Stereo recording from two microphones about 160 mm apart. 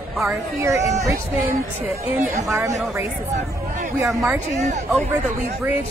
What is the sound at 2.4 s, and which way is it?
Speech, 20° right (ahead or behind).